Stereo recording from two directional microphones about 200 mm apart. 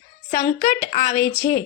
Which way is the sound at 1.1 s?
10° left (ahead or behind).